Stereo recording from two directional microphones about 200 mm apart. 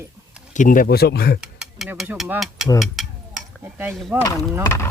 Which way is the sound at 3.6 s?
10° right (ahead or behind).